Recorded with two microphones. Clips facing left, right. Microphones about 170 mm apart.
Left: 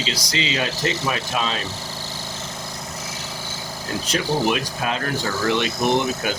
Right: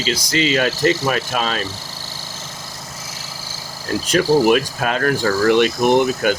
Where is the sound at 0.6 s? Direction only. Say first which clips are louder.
Right 7 dB; 65° right (ahead or behind).